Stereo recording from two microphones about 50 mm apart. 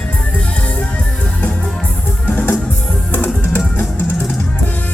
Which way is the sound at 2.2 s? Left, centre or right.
Left.